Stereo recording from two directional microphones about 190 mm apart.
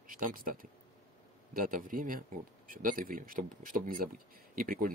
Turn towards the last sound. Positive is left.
turn(degrees=-50)  # may be behind; listen again after turning